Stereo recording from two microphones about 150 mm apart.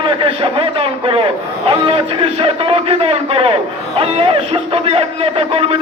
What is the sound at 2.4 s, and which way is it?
A man's voice, 40° right (ahead or behind).